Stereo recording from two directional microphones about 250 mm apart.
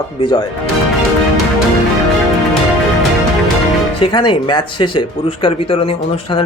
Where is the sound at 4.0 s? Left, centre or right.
Centre.